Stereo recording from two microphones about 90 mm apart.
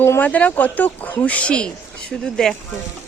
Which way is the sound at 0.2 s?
15° left (ahead or behind).